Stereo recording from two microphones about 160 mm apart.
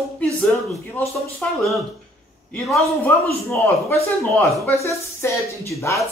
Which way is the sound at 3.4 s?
15° left (ahead or behind).